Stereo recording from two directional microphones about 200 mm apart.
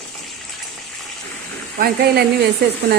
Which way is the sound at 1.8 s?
55° right (ahead or behind).